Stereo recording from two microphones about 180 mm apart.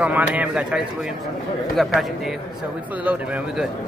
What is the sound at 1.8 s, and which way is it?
Speech, centre (ahead or behind).